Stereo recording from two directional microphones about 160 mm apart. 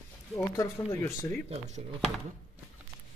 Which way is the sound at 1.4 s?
45° right (ahead or behind).